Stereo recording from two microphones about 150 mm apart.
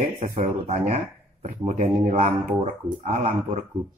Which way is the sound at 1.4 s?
60° right (ahead or behind).